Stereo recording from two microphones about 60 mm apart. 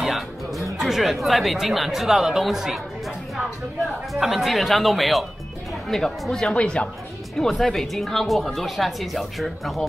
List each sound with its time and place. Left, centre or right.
0.0 s music: centre
0.7 s speech: centre
4.1 s speech: centre
6.5 s a woman's voice: centre
7.3 s speech: centre